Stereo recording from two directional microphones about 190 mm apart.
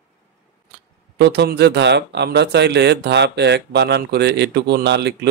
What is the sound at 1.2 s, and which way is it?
Speech, 60° right (ahead or behind).